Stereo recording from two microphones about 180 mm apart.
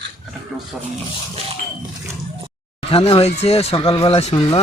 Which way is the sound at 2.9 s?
30° left (ahead or behind).